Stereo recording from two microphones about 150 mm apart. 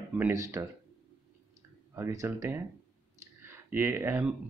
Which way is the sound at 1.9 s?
20° right (ahead or behind).